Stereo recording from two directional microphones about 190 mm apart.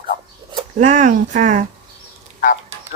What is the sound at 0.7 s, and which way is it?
Speech, 40° right (ahead or behind).